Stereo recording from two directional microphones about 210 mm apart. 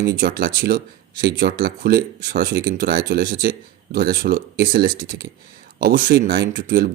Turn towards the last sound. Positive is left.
turn(degrees=-45)  # may be behind; listen again after turning